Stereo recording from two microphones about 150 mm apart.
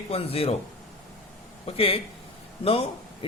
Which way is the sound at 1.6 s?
40° left (ahead or behind).